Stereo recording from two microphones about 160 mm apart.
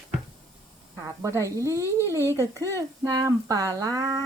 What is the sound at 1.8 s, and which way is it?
Speech, 15° left (ahead or behind).